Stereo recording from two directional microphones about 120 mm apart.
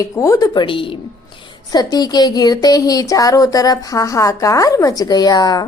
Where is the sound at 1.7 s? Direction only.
35° left (ahead or behind).